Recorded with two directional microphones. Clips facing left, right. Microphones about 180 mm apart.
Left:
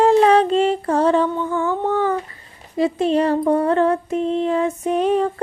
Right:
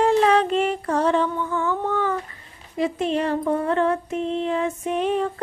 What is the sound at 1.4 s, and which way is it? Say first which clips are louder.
Humming: left 3 dB; 25° left (ahead or behind).